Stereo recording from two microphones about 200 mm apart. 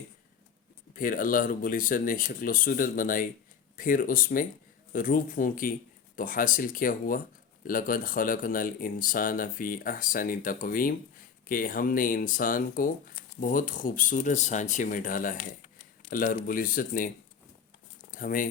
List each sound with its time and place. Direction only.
0.9 s speech: 45° left (ahead or behind)
18.1 s speech: 45° left (ahead or behind)